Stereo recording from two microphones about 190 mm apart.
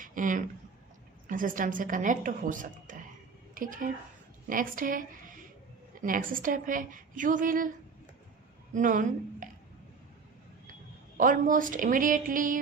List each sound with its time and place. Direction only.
0.0 s a woman's voice: 45° right (ahead or behind)
8.7 s speech: 45° right (ahead or behind)
11.2 s a woman's voice: 45° right (ahead or behind)